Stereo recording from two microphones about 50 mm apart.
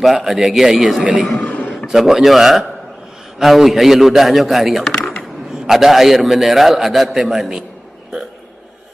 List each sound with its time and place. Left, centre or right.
0.0 s a man's voice: centre
1.4 s a sound: left
1.9 s a man's voice: centre